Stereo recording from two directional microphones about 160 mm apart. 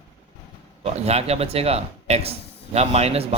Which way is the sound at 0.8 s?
40° right (ahead or behind).